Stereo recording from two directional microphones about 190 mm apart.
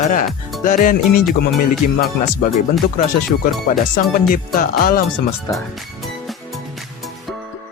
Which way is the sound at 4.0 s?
45° left (ahead or behind).